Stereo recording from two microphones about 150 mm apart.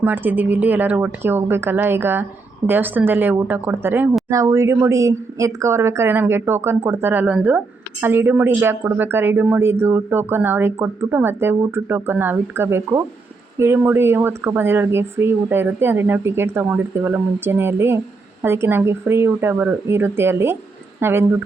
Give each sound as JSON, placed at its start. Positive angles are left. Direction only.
{"t": 0.0, "sound": "speech", "side_deg": -10}